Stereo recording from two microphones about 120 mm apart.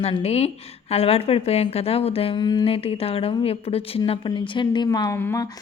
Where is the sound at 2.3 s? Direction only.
35° left (ahead or behind).